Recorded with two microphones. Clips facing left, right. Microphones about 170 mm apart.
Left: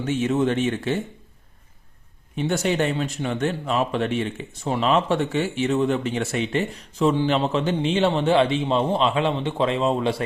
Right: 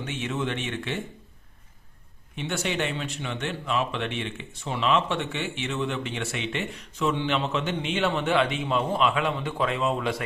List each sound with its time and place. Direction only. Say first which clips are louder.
0.0 s speech: left 9 dB; 40° left (ahead or behind)
2.3 s speech: left 7 dB; 40° left (ahead or behind)